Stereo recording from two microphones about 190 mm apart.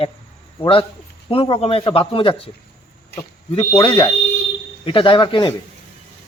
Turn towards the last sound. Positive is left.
turn(degrees=25)  # may be behind; listen again after turning